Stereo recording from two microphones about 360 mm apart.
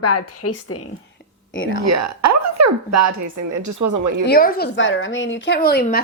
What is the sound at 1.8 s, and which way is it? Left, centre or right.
A woman's voice, right.